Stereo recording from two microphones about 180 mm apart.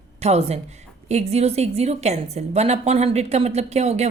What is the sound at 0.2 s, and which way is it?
A woman's voice, 35° right (ahead or behind).